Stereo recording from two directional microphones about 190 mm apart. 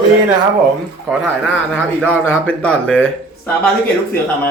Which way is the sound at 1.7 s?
5° left (ahead or behind).